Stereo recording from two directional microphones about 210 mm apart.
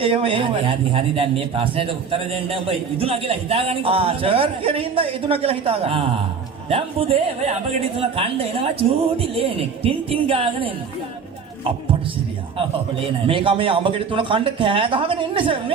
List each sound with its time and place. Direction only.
0.0 s a man's voice: 25° right (ahead or behind)
13.2 s a man's voice: 25° right (ahead or behind)